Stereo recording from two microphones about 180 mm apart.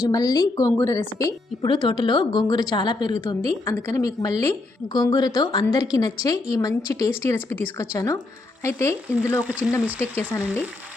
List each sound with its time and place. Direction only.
0.1 s a woman's voice: 20° left (ahead or behind)
9.4 s speech: 5° right (ahead or behind)
10.0 s speech: 10° left (ahead or behind)